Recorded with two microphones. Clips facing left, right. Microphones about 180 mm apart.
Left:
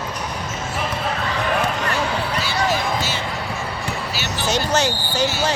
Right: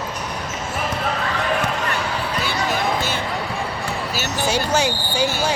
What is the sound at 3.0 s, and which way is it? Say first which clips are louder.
Basketball bounce: right 1 dB; 55° right (ahead or behind).